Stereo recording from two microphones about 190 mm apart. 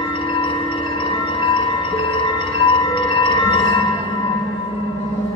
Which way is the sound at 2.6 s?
25° left (ahead or behind).